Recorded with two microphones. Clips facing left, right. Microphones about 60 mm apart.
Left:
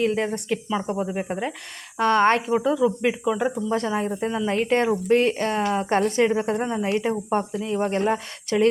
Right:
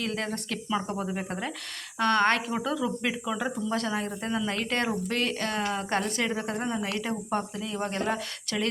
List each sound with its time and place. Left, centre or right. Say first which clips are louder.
0.0 s speech: left 8 dB; left